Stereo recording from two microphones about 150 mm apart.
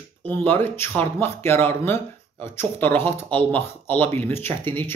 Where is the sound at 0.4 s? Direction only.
15° left (ahead or behind).